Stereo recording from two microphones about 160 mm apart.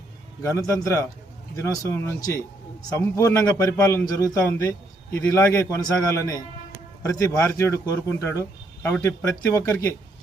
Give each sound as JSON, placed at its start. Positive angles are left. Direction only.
{"t": 0.4, "sound": "speech", "side_deg": 20}